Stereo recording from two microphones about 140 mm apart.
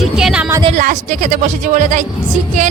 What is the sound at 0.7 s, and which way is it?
A woman's voice, 65° right (ahead or behind).